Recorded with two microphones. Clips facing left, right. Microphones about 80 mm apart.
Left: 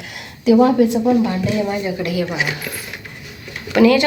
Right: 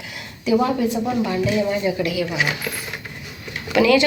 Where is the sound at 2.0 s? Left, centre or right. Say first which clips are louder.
Left 2 dB; left.